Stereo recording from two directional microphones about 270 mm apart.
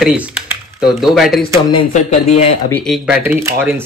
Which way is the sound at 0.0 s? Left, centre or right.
Centre.